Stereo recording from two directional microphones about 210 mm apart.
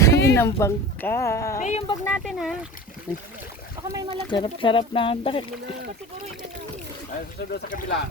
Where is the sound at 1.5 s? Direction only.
35° left (ahead or behind).